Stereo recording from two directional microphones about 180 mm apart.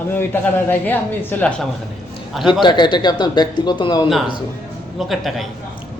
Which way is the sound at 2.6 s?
25° left (ahead or behind).